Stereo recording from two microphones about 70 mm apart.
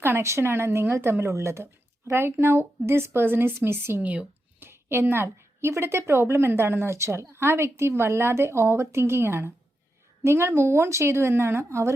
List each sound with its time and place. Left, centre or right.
0.0 s a woman's voice: right
4.0 s speech: right
4.6 s a woman's voice: right